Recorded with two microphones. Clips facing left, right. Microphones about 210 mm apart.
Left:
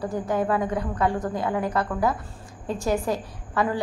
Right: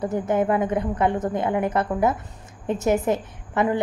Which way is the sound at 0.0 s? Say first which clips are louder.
Right 3 dB; 20° right (ahead or behind).